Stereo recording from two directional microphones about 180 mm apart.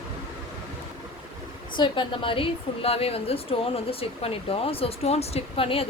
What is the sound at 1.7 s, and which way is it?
A woman's voice, 25° left (ahead or behind).